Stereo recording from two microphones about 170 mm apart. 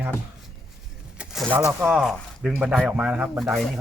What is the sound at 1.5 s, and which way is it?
Speech, 15° right (ahead or behind).